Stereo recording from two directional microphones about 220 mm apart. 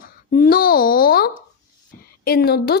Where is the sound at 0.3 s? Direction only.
40° left (ahead or behind).